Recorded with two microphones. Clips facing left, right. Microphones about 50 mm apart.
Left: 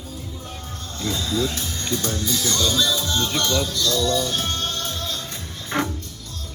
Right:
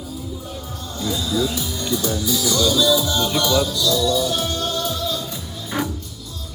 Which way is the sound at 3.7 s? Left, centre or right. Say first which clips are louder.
Right 2 dB; left.